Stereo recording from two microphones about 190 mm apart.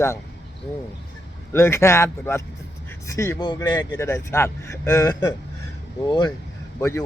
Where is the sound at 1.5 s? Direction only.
15° left (ahead or behind).